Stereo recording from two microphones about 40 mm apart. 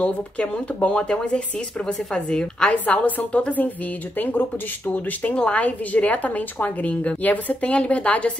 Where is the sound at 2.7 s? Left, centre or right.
Left.